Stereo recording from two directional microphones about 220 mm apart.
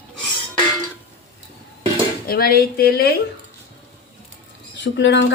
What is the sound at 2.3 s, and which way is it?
Speech, 45° left (ahead or behind).